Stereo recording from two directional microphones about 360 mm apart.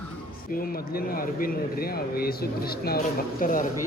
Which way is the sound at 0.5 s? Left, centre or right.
Left.